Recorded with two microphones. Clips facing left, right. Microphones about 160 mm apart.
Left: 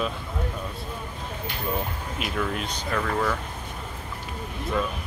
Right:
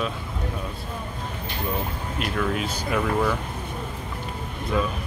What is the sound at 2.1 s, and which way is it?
Speech, centre (ahead or behind).